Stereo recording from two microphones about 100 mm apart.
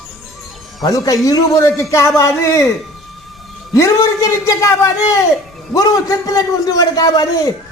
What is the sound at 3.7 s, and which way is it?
Speech, 30° left (ahead or behind).